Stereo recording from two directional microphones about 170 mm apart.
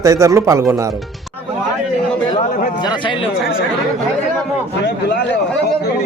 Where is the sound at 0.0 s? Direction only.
20° right (ahead or behind).